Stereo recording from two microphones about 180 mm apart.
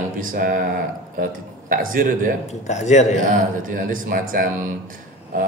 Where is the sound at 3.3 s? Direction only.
50° right (ahead or behind).